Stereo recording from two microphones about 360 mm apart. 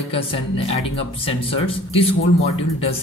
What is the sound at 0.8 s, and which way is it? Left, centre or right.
Speech, centre.